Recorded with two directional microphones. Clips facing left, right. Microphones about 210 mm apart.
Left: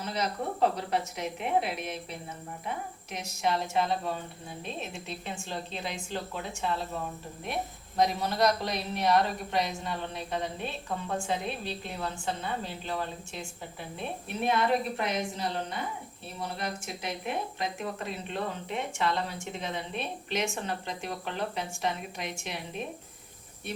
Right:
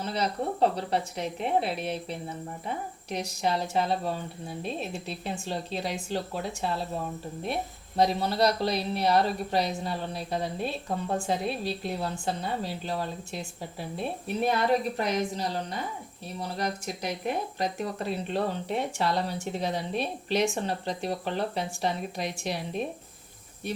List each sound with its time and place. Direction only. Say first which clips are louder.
0.0 s speech: right 3 dB; 30° right (ahead or behind)
7.9 s speech: right 2 dB; 30° right (ahead or behind)